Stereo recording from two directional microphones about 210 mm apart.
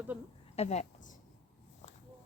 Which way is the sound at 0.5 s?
30° left (ahead or behind).